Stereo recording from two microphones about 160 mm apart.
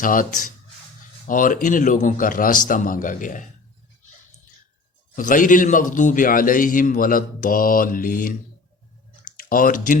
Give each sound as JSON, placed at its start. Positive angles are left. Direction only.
{"t": 0.0, "sound": "a man's voice", "side_deg": 60}
{"t": 5.1, "sound": "a man's voice", "side_deg": 55}
{"t": 9.4, "sound": "speech", "side_deg": 60}